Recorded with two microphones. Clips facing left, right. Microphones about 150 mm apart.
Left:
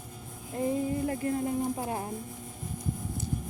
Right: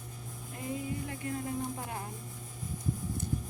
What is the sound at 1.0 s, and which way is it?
Speech, 35° left (ahead or behind).